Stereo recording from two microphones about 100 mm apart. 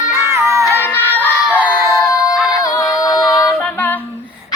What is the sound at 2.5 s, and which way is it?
Female singing, 35° left (ahead or behind).